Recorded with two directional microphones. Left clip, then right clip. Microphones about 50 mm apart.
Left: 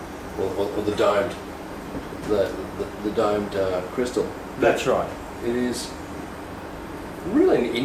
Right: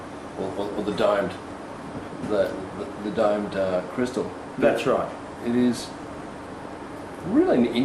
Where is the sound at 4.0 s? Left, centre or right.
Centre.